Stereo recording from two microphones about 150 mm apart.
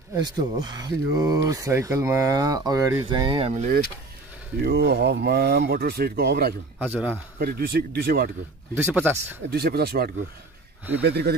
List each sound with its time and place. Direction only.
0.1 s speech: 30° right (ahead or behind)
4.6 s speech: 90° right
6.8 s speech: 10° right (ahead or behind)
7.3 s speech: 90° right
8.7 s speech: 15° right (ahead or behind)
9.5 s speech: 90° right